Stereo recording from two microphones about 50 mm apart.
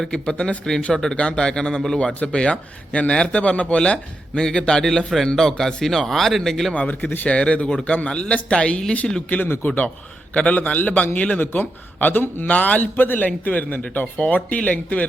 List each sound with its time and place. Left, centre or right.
0.1 s a man's voice: centre
6.7 s a man's voice: left
9.6 s a man's voice: left